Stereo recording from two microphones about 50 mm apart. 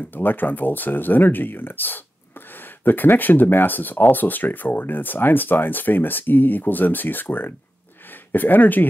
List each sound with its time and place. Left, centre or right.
0.1 s speech: left